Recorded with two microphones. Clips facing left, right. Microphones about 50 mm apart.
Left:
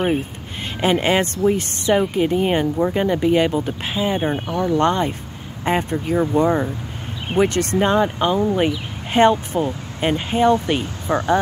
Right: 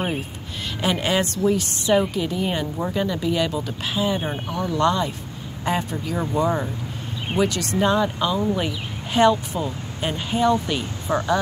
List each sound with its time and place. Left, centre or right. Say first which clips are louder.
0.7 s speech: left 4 dB; left